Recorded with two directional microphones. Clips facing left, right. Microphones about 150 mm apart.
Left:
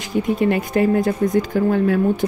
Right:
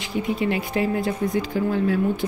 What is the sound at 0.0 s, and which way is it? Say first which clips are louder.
Speech: left 5 dB; 45° left (ahead or behind).